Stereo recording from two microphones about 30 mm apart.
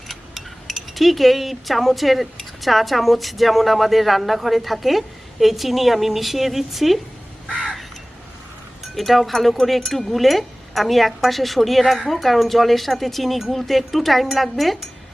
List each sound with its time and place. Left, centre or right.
0.1 s speech: centre
7.5 s crow: right
8.8 s speech: centre